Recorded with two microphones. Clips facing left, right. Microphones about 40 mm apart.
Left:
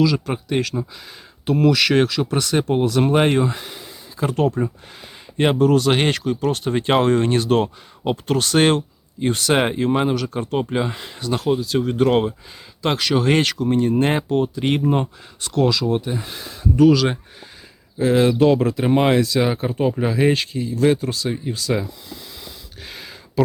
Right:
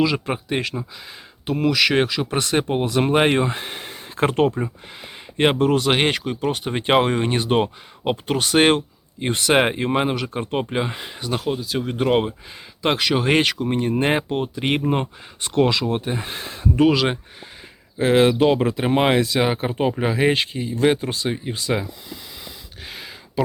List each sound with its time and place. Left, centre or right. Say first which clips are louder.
0.0 s speech: left 2 dB; right
1.5 s speech: left 2 dB; centre
2.3 s speech: left 1 dB; right
5.4 s speech: left 2 dB; right
18.3 s speech: left 2 dB; right
22.8 s a sound: right 1 dB; centre